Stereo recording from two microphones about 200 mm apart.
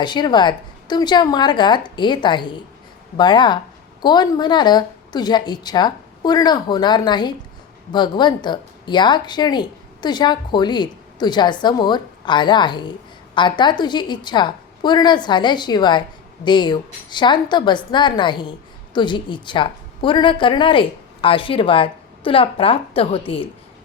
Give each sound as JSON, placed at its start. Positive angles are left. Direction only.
{"t": 0.0, "sound": "a woman's voice", "side_deg": 20}